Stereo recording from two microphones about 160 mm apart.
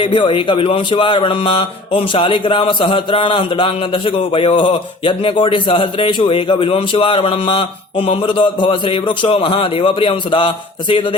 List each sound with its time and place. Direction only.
0.0 s speech: 30° left (ahead or behind)